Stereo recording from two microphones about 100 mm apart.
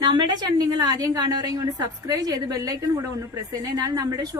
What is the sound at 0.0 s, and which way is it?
A woman's voice, 45° right (ahead or behind).